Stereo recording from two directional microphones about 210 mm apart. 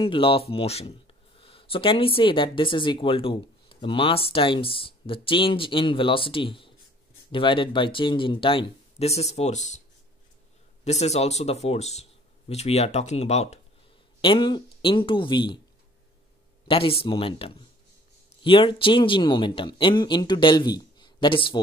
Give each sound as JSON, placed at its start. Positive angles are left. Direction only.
{"t": 0.0, "sound": "speech", "side_deg": 25}
{"t": 10.8, "sound": "speech", "side_deg": 30}
{"t": 16.6, "sound": "speech", "side_deg": 25}